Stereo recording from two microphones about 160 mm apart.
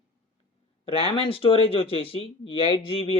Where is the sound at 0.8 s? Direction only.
35° left (ahead or behind).